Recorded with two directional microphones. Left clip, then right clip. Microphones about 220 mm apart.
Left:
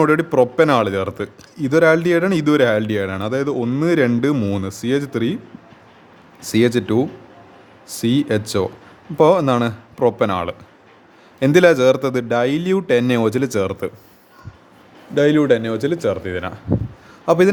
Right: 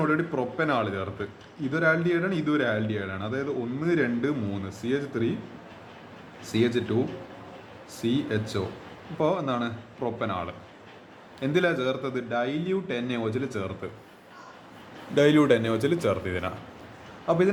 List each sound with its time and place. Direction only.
0.0 s speech: 50° left (ahead or behind)
6.4 s speech: 50° left (ahead or behind)
15.1 s speech: 20° left (ahead or behind)
17.2 s a man's voice: 45° left (ahead or behind)